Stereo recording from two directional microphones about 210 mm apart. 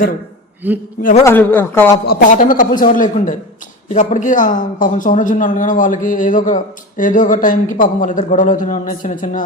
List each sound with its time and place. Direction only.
0.6 s a sound: 10° right (ahead or behind)
1.2 s speech: 10° left (ahead or behind)
2.0 s speech: 45° left (ahead or behind)